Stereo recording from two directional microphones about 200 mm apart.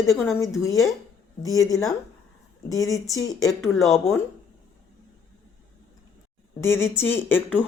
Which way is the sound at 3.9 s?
15° left (ahead or behind).